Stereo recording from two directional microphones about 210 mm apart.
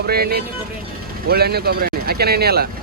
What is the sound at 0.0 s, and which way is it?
Speech, 45° right (ahead or behind).